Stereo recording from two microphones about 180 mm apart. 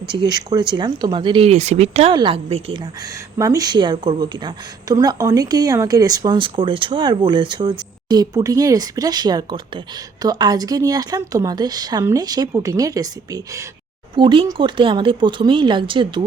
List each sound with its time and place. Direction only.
0.1 s a woman's voice: 25° right (ahead or behind)
3.3 s a woman's voice: 20° right (ahead or behind)